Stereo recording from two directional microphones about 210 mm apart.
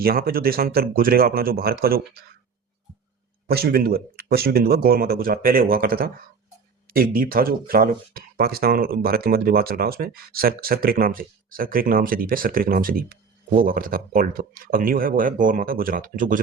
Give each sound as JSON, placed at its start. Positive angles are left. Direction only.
{"t": 0.0, "sound": "speech", "side_deg": -45}
{"t": 3.4, "sound": "speech", "side_deg": -45}